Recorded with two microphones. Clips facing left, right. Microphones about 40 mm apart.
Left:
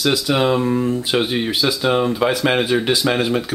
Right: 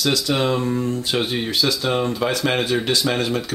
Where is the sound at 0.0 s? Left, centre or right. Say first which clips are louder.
Left 3 dB; centre.